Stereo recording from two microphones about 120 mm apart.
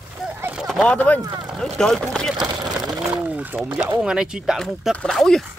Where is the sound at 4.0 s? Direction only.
5° right (ahead or behind).